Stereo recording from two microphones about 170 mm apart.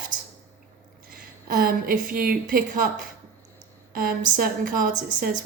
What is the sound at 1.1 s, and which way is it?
A woman's voice, 60° right (ahead or behind).